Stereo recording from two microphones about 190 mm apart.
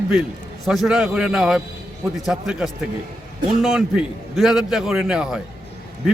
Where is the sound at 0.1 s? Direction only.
Centre (ahead or behind).